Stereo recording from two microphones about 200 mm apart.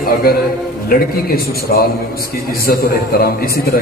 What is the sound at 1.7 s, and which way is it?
Speech, 50° left (ahead or behind).